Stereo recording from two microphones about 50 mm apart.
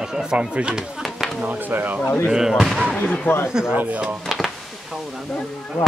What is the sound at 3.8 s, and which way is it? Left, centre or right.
Speech, right.